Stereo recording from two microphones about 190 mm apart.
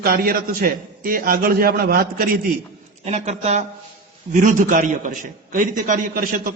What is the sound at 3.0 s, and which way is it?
A man's voice, 35° right (ahead or behind).